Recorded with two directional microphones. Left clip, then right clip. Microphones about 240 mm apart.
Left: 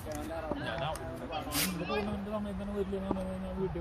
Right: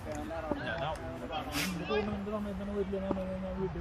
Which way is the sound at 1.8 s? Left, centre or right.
Centre.